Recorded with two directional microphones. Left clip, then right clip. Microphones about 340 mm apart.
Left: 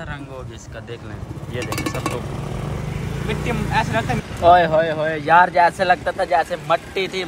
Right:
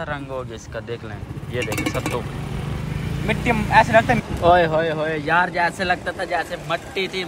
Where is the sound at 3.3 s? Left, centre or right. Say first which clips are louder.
Right 5 dB; centre.